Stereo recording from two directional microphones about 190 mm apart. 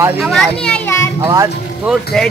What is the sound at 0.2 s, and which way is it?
Speech, centre (ahead or behind).